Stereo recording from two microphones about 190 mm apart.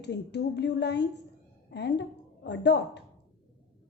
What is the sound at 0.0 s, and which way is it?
A woman's voice, 65° left (ahead or behind).